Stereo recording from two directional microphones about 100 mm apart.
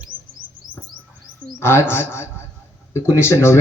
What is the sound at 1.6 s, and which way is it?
A man's voice, 25° left (ahead or behind).